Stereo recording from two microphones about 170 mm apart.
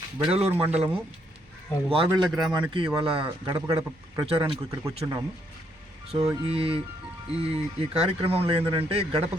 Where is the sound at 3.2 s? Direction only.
20° right (ahead or behind).